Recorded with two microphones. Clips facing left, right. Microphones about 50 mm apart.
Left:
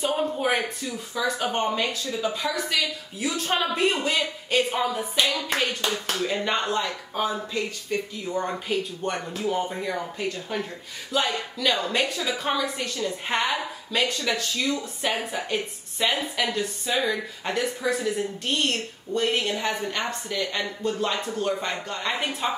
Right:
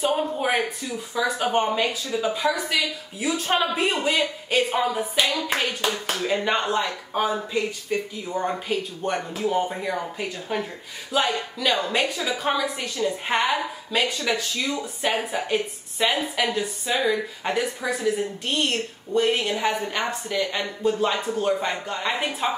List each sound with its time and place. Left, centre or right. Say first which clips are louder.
0.0 s a woman's voice: right 1 dB; centre
5.2 s hands: right 1 dB; right
5.5 s a woman's voice: right 1 dB; centre